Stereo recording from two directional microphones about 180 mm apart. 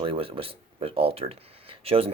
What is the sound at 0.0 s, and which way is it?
Speech, 30° right (ahead or behind).